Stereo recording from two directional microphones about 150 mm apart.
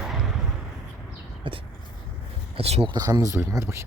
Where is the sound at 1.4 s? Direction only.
35° right (ahead or behind).